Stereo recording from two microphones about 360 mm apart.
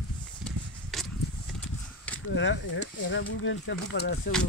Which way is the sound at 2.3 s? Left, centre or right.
Left.